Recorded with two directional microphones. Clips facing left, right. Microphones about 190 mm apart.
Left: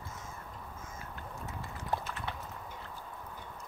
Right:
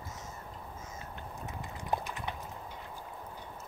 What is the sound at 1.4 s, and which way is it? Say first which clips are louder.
Clip-clop: right 1 dB; 15° right (ahead or behind).